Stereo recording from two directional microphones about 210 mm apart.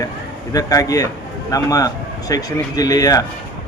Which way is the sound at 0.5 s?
15° left (ahead or behind).